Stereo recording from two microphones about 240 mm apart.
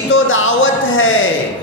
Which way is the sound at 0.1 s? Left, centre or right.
Left.